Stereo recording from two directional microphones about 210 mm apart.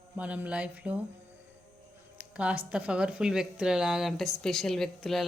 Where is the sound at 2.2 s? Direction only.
5° right (ahead or behind).